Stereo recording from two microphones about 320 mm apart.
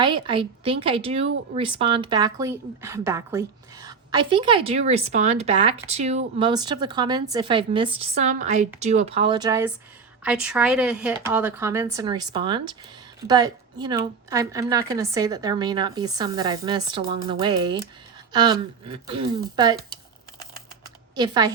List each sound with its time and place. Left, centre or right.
0.0 s speech: centre
21.2 s speech: centre